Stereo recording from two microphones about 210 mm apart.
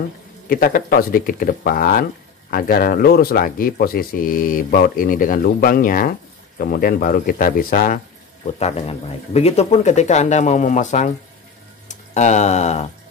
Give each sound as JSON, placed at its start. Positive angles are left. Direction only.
{"t": 0.5, "sound": "speech", "side_deg": 40}
{"t": 8.5, "sound": "speech", "side_deg": 30}